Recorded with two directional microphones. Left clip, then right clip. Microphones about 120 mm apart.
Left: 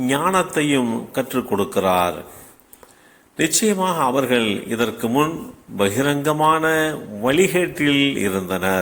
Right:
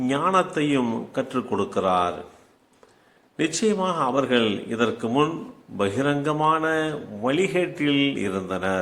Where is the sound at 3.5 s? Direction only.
25° left (ahead or behind).